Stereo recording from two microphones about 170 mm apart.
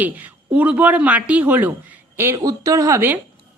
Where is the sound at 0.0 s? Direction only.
10° right (ahead or behind).